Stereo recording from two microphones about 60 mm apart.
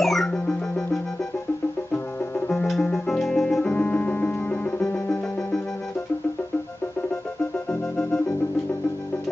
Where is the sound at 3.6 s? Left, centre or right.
Left.